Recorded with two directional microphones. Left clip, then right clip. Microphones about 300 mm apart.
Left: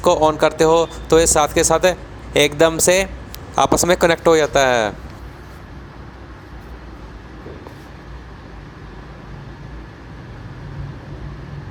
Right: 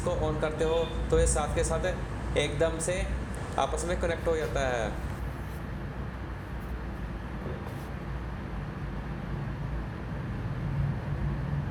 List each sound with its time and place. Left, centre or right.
0.0 s speech: left